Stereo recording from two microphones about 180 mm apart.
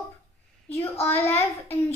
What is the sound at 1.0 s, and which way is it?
Speech, 10° left (ahead or behind).